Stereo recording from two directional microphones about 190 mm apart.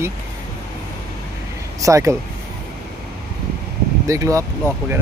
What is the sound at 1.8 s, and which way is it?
Speech, 15° right (ahead or behind).